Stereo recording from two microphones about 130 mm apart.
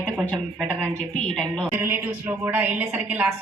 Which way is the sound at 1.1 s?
5° left (ahead or behind).